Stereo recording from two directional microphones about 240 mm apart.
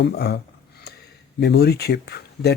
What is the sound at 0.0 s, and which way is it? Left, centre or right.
Speech, left.